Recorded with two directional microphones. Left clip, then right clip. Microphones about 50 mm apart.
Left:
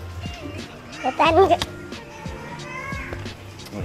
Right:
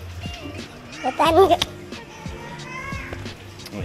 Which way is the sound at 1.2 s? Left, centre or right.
Right.